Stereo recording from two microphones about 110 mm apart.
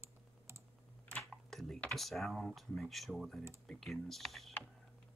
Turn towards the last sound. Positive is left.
turn(degrees=0)  # may be behind; listen again after turning